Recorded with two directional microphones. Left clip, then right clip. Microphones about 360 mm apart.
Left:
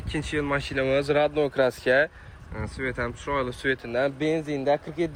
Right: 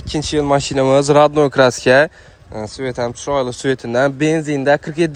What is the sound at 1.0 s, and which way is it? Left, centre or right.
Speech, right.